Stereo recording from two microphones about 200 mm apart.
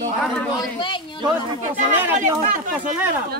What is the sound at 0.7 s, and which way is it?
Speech, 25° left (ahead or behind).